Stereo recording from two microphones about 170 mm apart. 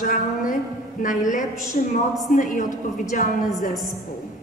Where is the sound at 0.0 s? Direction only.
50° left (ahead or behind).